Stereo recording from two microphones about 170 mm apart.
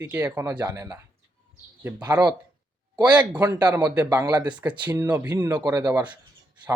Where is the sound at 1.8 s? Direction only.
10° right (ahead or behind).